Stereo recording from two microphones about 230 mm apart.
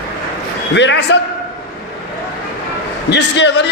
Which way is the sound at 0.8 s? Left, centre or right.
Left.